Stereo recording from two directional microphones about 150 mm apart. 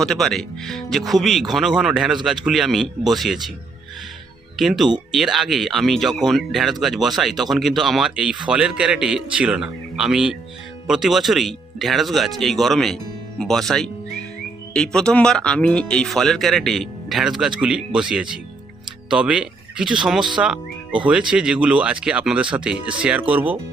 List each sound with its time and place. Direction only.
0.0 s speech: 5° left (ahead or behind)
4.5 s speech: centre (ahead or behind)